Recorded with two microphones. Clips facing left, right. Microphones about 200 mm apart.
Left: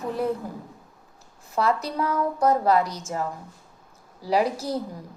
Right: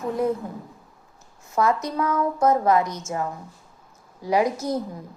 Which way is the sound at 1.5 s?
35° left (ahead or behind).